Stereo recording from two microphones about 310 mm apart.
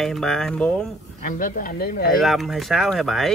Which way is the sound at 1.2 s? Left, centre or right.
Left.